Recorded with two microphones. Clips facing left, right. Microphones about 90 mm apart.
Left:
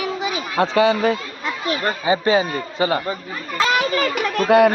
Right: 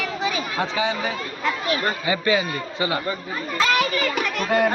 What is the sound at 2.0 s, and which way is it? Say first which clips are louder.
A man's voice: left 4 dB; 30° left (ahead or behind).